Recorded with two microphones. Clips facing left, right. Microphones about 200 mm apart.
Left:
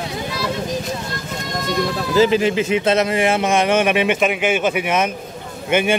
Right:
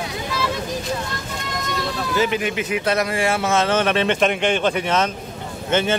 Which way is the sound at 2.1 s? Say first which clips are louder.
Left 7 dB; 30° left (ahead or behind).